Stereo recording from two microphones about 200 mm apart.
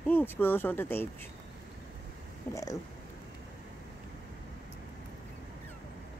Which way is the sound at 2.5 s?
15° left (ahead or behind).